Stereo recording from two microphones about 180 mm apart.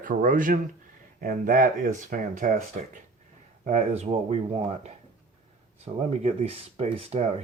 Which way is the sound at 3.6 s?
40° right (ahead or behind).